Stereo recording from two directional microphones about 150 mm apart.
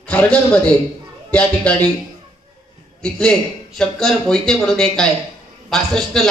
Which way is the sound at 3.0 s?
5° left (ahead or behind).